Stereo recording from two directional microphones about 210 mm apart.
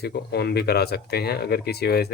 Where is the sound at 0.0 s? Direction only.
50° left (ahead or behind).